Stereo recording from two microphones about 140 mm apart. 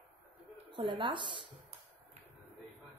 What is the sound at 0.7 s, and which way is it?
Speech, 35° right (ahead or behind).